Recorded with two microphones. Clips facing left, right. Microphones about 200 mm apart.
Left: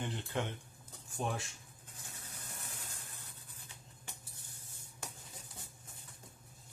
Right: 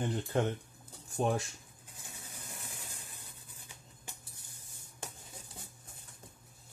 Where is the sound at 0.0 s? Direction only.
45° right (ahead or behind).